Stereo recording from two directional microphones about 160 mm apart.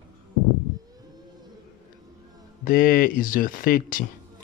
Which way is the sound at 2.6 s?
60° left (ahead or behind).